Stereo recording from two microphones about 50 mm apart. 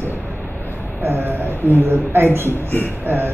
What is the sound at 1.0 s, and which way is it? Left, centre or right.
A man's voice, right.